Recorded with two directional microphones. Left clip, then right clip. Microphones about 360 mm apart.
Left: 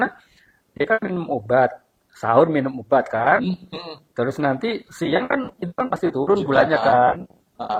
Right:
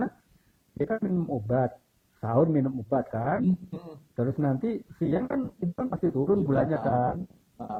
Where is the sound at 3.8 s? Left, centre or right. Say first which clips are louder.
Left 8 dB; centre.